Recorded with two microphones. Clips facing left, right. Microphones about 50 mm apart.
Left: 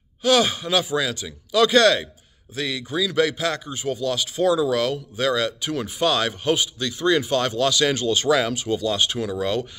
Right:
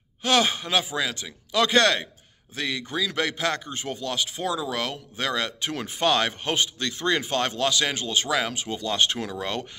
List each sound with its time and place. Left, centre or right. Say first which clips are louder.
0.2 s speech: left 3 dB; right
7.2 s speech: left 4 dB; right